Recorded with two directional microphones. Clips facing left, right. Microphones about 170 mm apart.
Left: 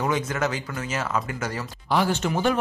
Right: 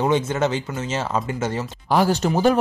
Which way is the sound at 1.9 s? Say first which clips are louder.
Right 4 dB; 40° right (ahead or behind).